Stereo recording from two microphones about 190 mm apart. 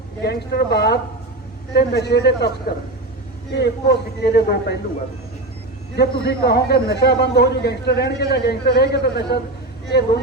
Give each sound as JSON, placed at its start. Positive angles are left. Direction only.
{"t": 0.2, "sound": "a man's voice", "side_deg": 60}
{"t": 6.0, "sound": "a man's voice", "side_deg": 60}